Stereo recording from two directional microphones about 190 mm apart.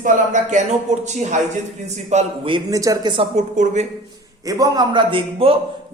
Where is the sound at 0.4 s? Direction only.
40° right (ahead or behind).